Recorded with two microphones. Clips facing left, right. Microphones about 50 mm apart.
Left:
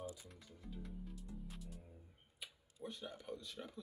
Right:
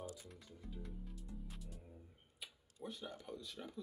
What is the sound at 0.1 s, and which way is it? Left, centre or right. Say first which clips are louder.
Music: right 2 dB; centre.